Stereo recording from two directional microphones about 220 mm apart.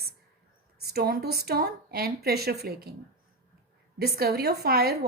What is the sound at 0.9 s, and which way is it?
A woman's voice, 45° right (ahead or behind).